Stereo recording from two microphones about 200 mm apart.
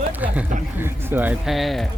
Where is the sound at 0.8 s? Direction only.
10° right (ahead or behind).